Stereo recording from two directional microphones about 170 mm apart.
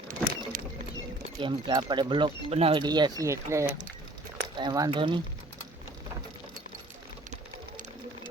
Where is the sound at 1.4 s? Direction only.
25° right (ahead or behind).